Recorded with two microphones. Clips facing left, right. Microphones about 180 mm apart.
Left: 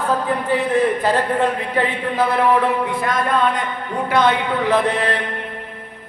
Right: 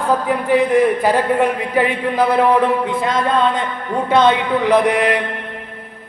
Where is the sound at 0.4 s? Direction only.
15° right (ahead or behind).